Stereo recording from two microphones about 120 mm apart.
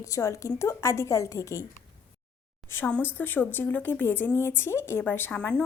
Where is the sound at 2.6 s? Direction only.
20° left (ahead or behind).